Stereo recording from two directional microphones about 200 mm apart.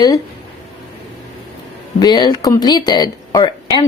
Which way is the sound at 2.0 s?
20° left (ahead or behind).